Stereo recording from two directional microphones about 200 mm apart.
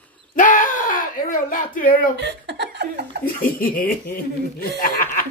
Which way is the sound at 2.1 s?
55° right (ahead or behind).